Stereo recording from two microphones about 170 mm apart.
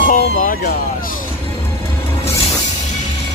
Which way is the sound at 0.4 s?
50° left (ahead or behind).